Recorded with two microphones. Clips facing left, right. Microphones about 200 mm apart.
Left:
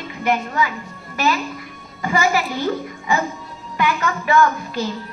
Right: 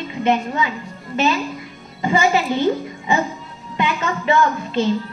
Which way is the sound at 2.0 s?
25° right (ahead or behind).